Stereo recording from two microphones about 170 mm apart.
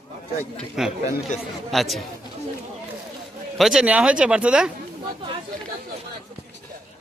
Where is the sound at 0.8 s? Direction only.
Centre (ahead or behind).